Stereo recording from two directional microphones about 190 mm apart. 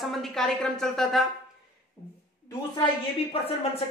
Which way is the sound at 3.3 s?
30° left (ahead or behind).